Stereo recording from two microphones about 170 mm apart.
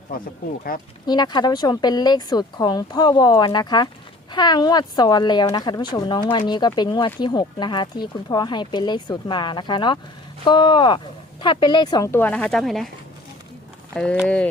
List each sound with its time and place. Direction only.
0.1 s speech: 60° left (ahead or behind)
1.0 s speech: 25° left (ahead or behind); by 12.9 s centre (ahead or behind)
13.9 s speech: 5° left (ahead or behind)